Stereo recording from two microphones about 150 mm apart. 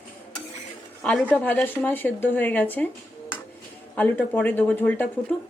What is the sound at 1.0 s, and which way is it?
Speech, 5° left (ahead or behind).